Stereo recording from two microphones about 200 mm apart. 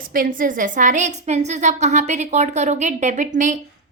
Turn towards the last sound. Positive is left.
turn(degrees=-40)  # may be behind; listen again after turning